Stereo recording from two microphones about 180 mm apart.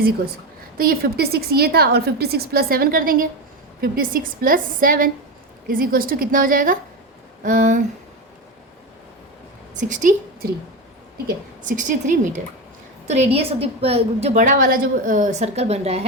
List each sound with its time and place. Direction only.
0.8 s a woman's voice: 55° right (ahead or behind)
9.7 s a woman's voice: 45° right (ahead or behind)
11.6 s a woman's voice: 45° right (ahead or behind)